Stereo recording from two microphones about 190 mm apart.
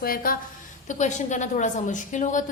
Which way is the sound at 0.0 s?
50° left (ahead or behind).